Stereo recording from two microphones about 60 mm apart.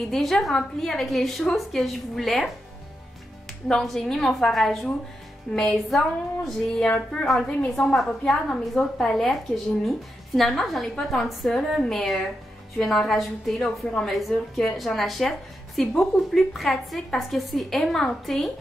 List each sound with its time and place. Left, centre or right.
0.1 s a woman's voice: centre
3.6 s a woman's voice: centre
5.5 s a woman's voice: centre
5.9 s a woman's voice: centre
6.8 s a woman's voice: centre